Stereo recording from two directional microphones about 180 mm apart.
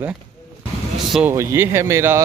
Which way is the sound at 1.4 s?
15° right (ahead or behind).